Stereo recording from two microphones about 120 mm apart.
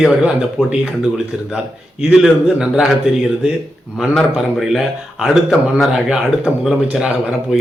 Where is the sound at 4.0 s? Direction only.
Centre (ahead or behind).